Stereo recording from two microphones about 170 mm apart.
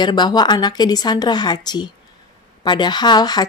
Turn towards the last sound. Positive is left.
turn(degrees=25)  # may be behind; listen again after turning